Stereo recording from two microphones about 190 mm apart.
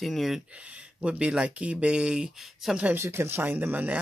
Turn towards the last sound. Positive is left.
turn(degrees=-10)  # may be behind; listen again after turning